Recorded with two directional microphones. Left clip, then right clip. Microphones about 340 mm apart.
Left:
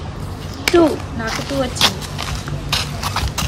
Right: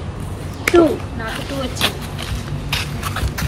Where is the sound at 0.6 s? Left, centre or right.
Left.